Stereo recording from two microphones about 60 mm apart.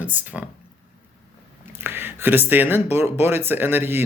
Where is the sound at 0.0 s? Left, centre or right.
Right.